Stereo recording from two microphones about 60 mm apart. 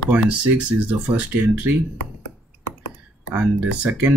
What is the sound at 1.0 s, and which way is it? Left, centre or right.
Speech, right.